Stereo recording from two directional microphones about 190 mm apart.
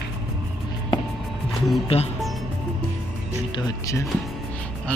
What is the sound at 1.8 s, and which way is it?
Speech, 30° left (ahead or behind).